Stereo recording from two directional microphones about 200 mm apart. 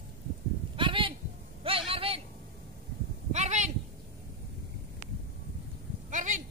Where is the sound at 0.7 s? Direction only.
25° right (ahead or behind).